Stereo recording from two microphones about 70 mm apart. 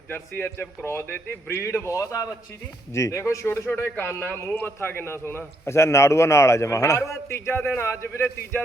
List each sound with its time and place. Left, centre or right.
0.1 s a man's voice: left
1.5 s a man's voice: left